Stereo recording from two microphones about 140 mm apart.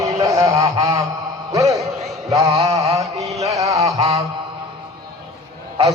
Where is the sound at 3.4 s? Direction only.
25° right (ahead or behind).